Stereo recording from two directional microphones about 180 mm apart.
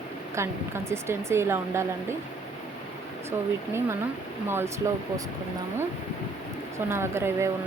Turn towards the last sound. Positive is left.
turn(degrees=-15)  # may be behind; listen again after turning